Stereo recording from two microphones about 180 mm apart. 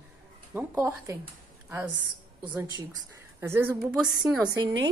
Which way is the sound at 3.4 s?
15° right (ahead or behind).